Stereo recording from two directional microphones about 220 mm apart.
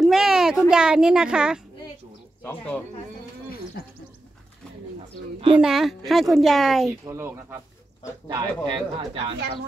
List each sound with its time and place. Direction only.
0.0 s a child's voice: centre (ahead or behind)
5.6 s speech: centre (ahead or behind)
7.1 s speech: 10° right (ahead or behind)